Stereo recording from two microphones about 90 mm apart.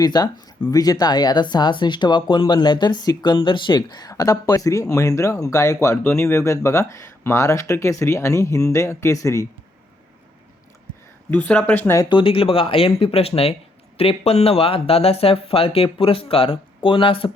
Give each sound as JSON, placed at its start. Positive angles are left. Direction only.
{"t": 0.0, "sound": "speech", "side_deg": 50}
{"t": 11.3, "sound": "speech", "side_deg": 20}
{"t": 12.0, "sound": "speech", "side_deg": 75}